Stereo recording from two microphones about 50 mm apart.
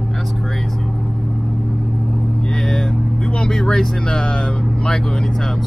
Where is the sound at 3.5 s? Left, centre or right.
Centre.